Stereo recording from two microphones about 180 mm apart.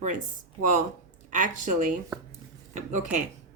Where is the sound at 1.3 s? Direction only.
45° right (ahead or behind).